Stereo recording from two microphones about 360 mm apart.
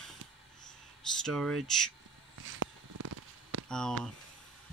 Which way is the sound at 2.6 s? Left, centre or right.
Right.